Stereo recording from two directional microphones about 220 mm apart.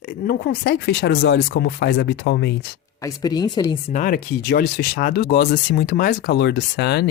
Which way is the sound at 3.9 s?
40° left (ahead or behind).